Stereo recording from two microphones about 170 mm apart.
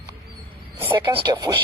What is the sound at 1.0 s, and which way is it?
Speech, 25° right (ahead or behind).